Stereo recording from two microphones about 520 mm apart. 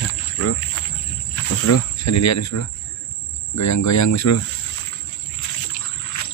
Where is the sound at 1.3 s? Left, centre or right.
Left.